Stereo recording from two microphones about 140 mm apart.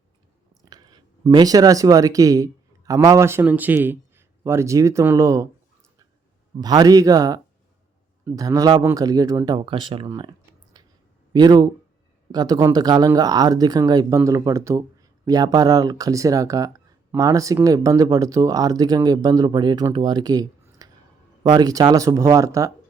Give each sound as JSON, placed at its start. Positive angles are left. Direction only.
{"t": 0.6, "sound": "speech", "side_deg": -30}
{"t": 6.6, "sound": "speech", "side_deg": -25}
{"t": 10.8, "sound": "clicking", "side_deg": -30}
{"t": 11.3, "sound": "speech", "side_deg": -30}